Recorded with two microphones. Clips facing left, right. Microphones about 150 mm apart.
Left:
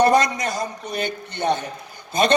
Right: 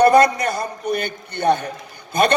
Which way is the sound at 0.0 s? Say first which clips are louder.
Right 4 dB; 60° right (ahead or behind).